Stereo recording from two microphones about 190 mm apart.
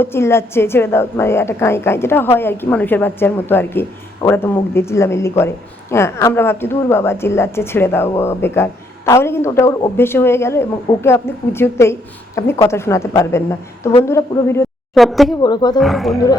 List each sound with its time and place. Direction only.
0.0 s speech: 15° left (ahead or behind)
14.9 s speech: centre (ahead or behind)
15.4 s speech: 20° left (ahead or behind)
15.8 s speech: centre (ahead or behind)